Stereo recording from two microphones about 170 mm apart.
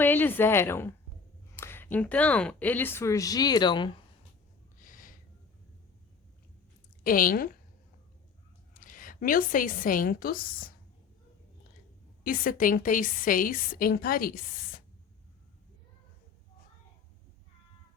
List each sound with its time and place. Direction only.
0.0 s speech: 10° left (ahead or behind); by 3.9 s 25° left (ahead or behind)
4.8 s snort: 50° left (ahead or behind)
7.0 s a woman's voice: 55° left (ahead or behind)
8.7 s a woman's voice: 50° left (ahead or behind)
12.2 s a woman's voice: 55° left (ahead or behind)